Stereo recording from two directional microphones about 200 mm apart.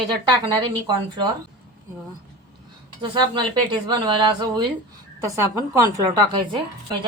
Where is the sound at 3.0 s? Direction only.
25° right (ahead or behind).